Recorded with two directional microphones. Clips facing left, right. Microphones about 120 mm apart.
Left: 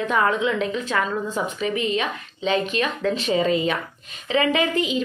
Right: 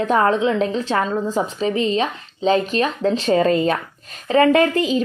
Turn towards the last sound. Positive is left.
turn(degrees=-40)  # may be behind; listen again after turning